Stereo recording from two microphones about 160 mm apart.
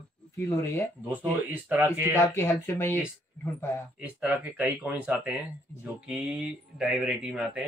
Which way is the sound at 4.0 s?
10° right (ahead or behind).